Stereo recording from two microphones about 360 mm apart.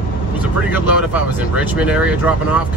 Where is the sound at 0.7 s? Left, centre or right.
Centre.